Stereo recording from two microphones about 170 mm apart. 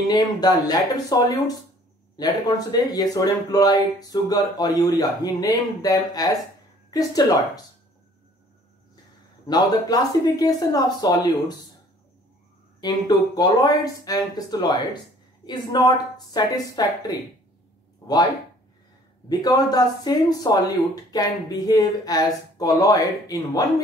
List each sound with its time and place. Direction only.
0.1 s speech: 25° left (ahead or behind)
9.5 s speech: 25° left (ahead or behind)
12.8 s speech: 25° left (ahead or behind)
19.2 s speech: 20° left (ahead or behind)